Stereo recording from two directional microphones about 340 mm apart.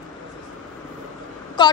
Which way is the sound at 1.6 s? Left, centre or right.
Centre.